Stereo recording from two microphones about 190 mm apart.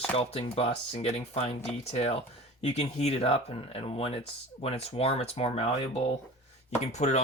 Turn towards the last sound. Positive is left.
turn(degrees=35)  # may be behind; listen again after turning